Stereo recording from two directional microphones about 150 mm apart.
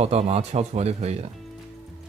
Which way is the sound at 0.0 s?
45° right (ahead or behind).